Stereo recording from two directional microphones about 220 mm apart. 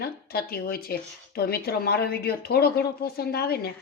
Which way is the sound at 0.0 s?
45° left (ahead or behind).